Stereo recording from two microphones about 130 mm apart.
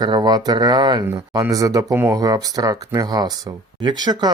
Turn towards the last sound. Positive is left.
turn(degrees=-30)  # may be behind; listen again after turning